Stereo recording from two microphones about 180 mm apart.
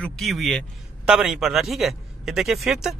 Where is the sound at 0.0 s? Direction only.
Centre (ahead or behind).